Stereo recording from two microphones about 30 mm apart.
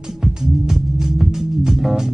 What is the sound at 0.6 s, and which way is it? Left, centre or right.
Music, centre.